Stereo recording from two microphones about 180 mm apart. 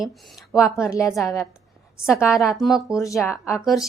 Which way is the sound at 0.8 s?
15° left (ahead or behind).